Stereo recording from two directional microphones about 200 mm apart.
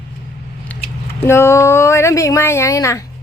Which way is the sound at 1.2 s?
10° left (ahead or behind).